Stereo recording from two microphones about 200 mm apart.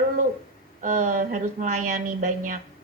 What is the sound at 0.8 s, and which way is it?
A woman's voice, 40° right (ahead or behind).